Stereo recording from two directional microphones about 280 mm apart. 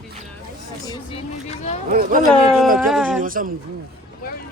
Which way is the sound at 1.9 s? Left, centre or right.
Right.